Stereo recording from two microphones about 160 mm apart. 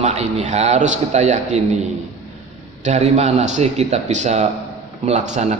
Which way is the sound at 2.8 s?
45° right (ahead or behind).